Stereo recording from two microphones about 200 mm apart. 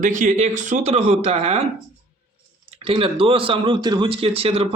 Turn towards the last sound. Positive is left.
turn(degrees=-30)  # may be behind; listen again after turning